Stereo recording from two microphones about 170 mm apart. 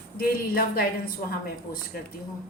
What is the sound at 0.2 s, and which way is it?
Speech, 60° left (ahead or behind).